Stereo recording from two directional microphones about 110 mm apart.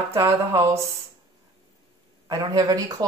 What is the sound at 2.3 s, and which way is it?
Speech, 35° right (ahead or behind).